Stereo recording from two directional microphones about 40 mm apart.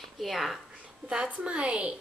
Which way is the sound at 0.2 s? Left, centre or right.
Centre.